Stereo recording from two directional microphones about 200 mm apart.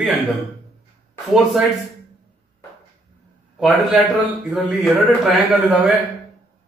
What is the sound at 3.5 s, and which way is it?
A man's voice, centre (ahead or behind).